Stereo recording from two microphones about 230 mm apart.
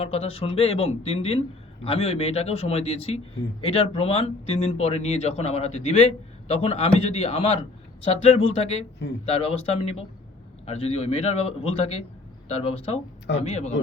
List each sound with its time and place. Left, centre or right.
0.0 s a man's voice: left
12.7 s a man's voice: left